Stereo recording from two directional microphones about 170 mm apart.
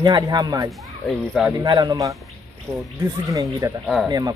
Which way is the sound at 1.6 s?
25° right (ahead or behind).